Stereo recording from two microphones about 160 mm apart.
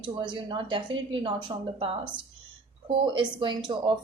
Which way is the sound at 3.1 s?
30° right (ahead or behind).